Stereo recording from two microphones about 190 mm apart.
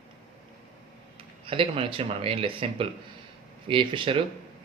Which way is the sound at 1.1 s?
30° right (ahead or behind).